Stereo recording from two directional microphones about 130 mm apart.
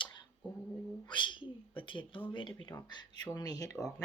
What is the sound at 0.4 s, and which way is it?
Dog, 35° left (ahead or behind).